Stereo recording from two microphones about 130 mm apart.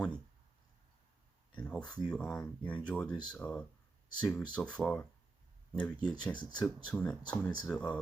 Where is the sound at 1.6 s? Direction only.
10° left (ahead or behind).